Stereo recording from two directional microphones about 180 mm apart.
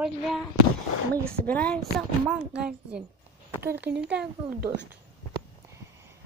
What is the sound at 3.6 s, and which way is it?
Speech, 65° right (ahead or behind).